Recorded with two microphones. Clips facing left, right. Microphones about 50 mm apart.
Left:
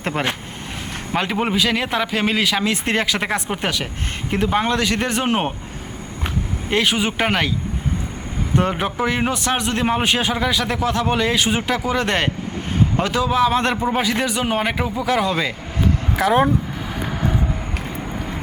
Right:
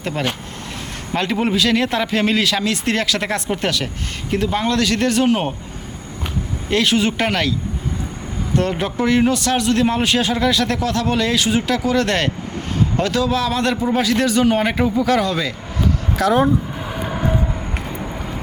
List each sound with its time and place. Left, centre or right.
0.0 s speech: left
1.1 s a man's voice: centre
5.3 s speech: left
6.7 s a man's voice: centre
8.5 s a man's voice: centre